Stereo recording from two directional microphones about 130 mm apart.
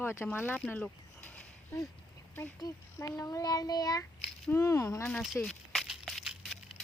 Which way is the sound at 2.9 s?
25° left (ahead or behind).